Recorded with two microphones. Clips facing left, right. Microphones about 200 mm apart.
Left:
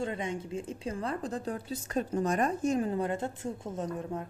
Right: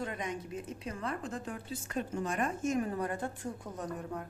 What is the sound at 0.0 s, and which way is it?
A woman's voice, 25° left (ahead or behind).